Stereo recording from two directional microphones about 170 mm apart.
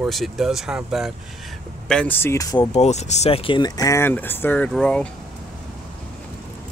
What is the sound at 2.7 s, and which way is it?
Speech, 40° left (ahead or behind).